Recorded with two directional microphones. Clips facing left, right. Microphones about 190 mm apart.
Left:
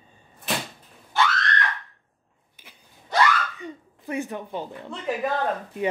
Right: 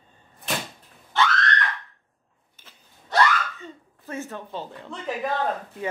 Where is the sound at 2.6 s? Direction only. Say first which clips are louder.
Left 2 dB; 15° left (ahead or behind).